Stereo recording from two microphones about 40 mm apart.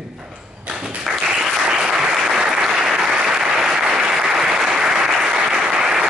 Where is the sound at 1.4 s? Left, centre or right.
Centre.